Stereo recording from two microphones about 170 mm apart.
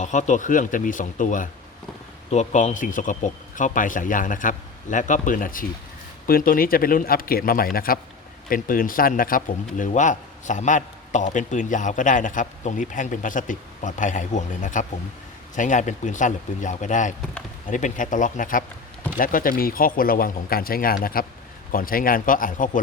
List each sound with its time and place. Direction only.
0.0 s speech: 45° left (ahead or behind)